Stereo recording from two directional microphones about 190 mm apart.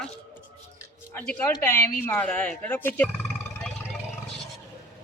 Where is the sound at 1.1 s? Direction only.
10° left (ahead or behind).